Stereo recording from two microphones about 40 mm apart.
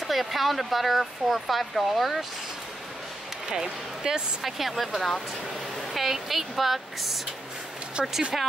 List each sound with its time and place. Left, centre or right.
0.0 s speech: centre
3.4 s speech: centre
4.4 s speech: centre
8.0 s speech: right